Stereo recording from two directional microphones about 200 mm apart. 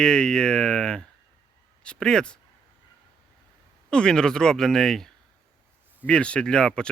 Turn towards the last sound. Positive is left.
turn(degrees=5)  # may be behind; listen again after turning